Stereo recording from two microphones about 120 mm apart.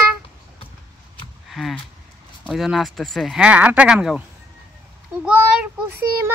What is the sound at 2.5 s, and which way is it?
Speech, centre (ahead or behind).